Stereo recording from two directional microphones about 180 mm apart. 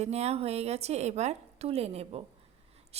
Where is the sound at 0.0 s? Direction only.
35° right (ahead or behind).